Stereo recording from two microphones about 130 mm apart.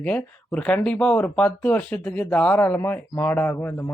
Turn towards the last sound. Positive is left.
turn(degrees=20)  # may be behind; listen again after turning